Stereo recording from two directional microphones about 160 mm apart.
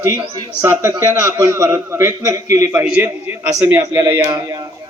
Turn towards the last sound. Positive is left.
turn(degrees=-15)  # may be behind; listen again after turning